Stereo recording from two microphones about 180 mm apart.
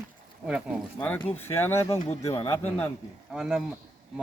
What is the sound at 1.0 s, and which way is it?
Speech, 10° left (ahead or behind).